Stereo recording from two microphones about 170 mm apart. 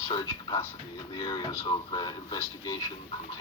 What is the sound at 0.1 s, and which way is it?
A man's voice, 25° left (ahead or behind).